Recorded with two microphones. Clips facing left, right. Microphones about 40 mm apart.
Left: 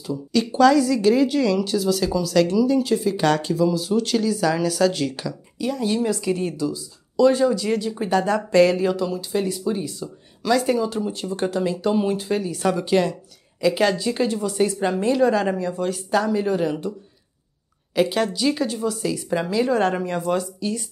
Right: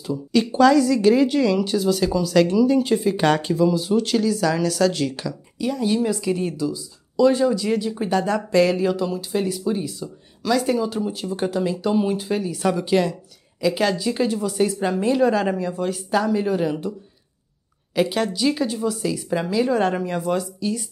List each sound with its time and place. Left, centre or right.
0.0 s a woman's voice: centre
17.9 s speech: centre